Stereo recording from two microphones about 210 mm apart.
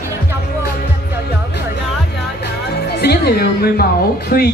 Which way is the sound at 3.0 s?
50° left (ahead or behind).